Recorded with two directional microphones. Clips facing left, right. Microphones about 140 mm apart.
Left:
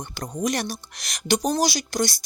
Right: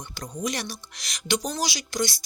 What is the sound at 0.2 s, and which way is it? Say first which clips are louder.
Speech: left 5 dB; 45° left (ahead or behind).